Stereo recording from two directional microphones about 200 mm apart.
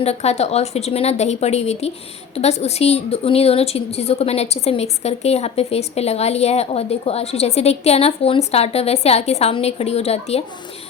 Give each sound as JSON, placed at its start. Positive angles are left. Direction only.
{"t": 0.0, "sound": "a woman's voice", "side_deg": 30}